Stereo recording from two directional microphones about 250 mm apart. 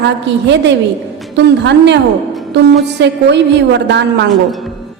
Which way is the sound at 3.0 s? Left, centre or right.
Right.